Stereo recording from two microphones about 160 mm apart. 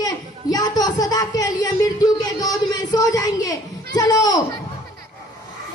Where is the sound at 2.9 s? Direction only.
25° left (ahead or behind).